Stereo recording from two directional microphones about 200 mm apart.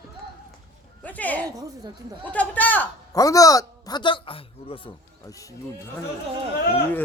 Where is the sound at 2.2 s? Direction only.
5° left (ahead or behind); by 4.8 s 25° left (ahead or behind).